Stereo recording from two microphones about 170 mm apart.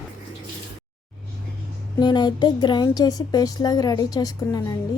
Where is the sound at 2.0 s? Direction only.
25° left (ahead or behind).